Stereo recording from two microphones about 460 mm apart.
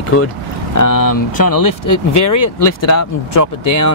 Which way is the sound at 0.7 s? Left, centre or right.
Left.